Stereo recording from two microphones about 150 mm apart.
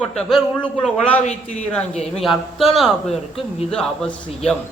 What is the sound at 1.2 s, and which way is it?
A man's voice, 50° left (ahead or behind).